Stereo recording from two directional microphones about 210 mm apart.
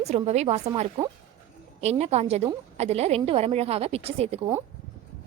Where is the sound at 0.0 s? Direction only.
30° right (ahead or behind).